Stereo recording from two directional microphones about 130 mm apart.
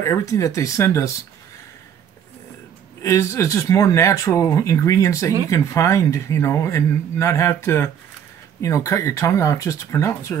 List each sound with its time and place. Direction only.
0.0 s speech: 25° left (ahead or behind)
3.0 s speech: 25° left (ahead or behind)